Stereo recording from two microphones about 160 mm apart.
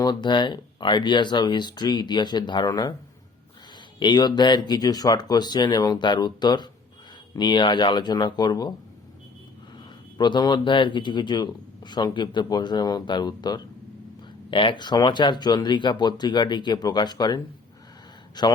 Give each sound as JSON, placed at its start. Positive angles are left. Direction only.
{"t": 0.0, "sound": "speech", "side_deg": 25}
{"t": 4.0, "sound": "speech", "side_deg": 25}
{"t": 9.7, "sound": "speech", "side_deg": 25}